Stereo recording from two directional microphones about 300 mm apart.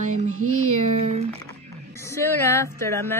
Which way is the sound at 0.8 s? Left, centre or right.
Right.